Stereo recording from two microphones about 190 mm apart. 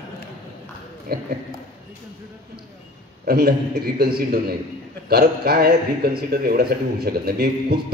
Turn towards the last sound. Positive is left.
turn(degrees=-55)  # may be behind; listen again after turning